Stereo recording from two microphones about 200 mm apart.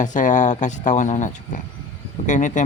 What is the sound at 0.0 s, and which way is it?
Speech, 40° left (ahead or behind).